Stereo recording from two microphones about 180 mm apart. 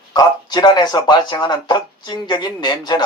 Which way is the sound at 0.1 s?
25° left (ahead or behind).